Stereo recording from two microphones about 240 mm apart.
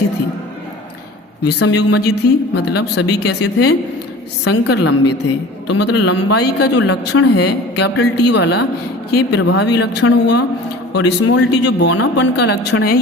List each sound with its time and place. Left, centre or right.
1.5 s speech: left